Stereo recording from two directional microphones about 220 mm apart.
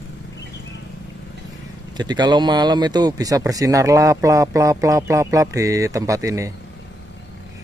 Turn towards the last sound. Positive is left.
turn(degrees=-15)  # may be behind; listen again after turning